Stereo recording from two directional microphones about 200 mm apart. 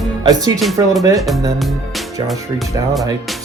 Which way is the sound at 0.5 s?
Centre (ahead or behind).